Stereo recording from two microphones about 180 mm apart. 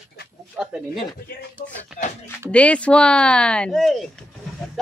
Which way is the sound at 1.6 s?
50° left (ahead or behind).